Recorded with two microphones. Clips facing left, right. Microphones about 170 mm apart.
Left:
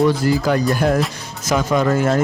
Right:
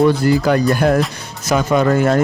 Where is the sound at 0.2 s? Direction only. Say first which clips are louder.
Right 3 dB; 60° right (ahead or behind).